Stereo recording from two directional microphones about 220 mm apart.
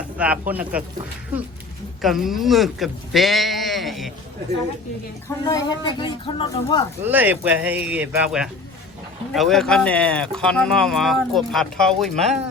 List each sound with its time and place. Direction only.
0.2 s speech: 5° right (ahead or behind)
2.0 s speech: centre (ahead or behind)
5.5 s a woman's voice: 20° left (ahead or behind)
7.0 s speech: 10° right (ahead or behind)